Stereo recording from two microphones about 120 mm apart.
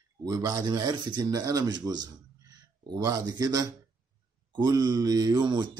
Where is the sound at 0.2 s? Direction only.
30° right (ahead or behind).